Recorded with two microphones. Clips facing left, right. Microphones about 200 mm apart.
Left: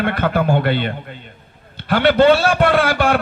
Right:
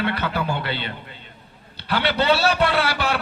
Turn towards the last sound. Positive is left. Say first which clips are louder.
# left 7 dB
turn(degrees=50)  # may be behind; listen again after turning